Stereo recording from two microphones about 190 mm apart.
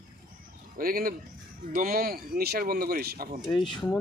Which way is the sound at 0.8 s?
50° right (ahead or behind).